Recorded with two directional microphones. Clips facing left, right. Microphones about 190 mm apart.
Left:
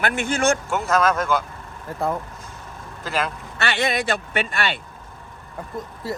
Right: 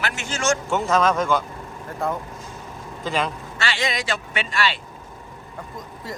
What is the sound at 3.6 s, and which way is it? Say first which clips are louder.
Speech: left 3 dB; 60° left (ahead or behind).